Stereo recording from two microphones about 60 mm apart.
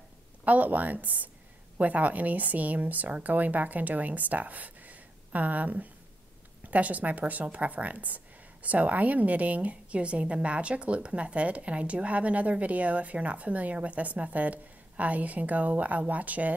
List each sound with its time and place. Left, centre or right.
0.5 s a woman's voice: right